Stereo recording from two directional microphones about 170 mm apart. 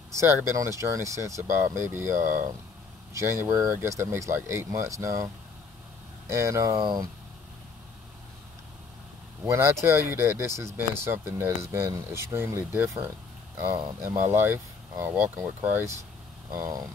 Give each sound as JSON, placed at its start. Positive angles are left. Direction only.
{"t": 0.1, "sound": "speech", "side_deg": -15}
{"t": 9.5, "sound": "speech", "side_deg": -15}
{"t": 13.7, "sound": "speech", "side_deg": -25}
{"t": 14.2, "sound": "speech", "side_deg": -15}